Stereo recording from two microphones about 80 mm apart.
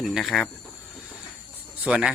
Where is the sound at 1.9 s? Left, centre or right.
Centre.